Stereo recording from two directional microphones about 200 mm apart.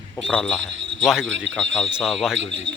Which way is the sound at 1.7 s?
Centre (ahead or behind).